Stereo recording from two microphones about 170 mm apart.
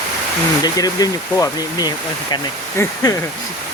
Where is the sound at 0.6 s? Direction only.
20° left (ahead or behind).